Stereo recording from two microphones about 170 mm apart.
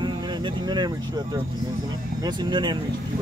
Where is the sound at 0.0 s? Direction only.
25° right (ahead or behind).